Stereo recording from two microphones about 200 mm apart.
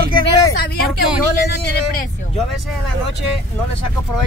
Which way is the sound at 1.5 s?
50° left (ahead or behind).